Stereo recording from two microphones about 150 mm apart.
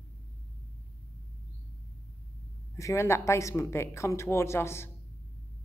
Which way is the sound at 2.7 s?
20° left (ahead or behind).